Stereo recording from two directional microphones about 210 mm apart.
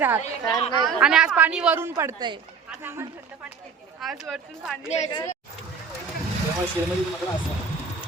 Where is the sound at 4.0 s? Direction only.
Centre (ahead or behind).